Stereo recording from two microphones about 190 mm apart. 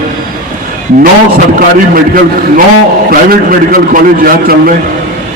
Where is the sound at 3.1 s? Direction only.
50° right (ahead or behind).